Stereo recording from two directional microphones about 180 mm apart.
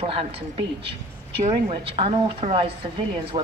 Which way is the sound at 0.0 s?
30° right (ahead or behind).